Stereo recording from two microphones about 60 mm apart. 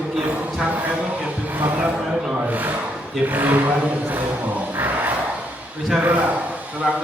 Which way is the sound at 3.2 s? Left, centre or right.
Right.